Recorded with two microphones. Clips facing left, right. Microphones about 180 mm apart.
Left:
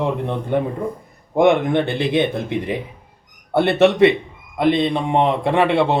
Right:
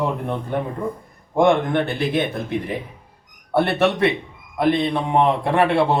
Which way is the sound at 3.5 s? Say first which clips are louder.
Left 4 dB; 20° left (ahead or behind).